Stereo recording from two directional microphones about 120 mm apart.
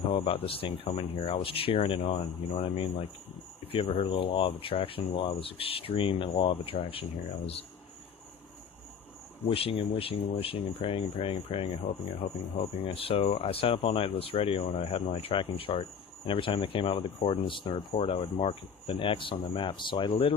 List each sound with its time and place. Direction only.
0.1 s speech: 55° left (ahead or behind)
2.5 s speech: 65° left (ahead or behind)
3.7 s speech: 50° left (ahead or behind)
9.4 s speech: 50° left (ahead or behind)
12.8 s speech: 50° left (ahead or behind)